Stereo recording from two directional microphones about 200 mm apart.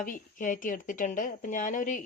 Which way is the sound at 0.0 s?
40° left (ahead or behind).